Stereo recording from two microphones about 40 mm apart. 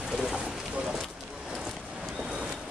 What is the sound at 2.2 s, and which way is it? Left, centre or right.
Vehicle, right.